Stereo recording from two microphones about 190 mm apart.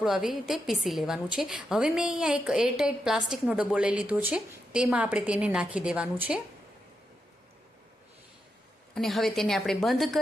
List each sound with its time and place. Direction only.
0.0 s a woman's voice: centre (ahead or behind)
9.0 s a woman's voice: centre (ahead or behind)